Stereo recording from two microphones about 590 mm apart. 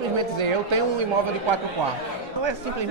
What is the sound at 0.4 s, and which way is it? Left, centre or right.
Speech, right.